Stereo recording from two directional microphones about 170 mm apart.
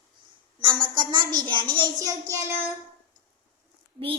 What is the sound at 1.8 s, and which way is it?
Child singing, 20° right (ahead or behind).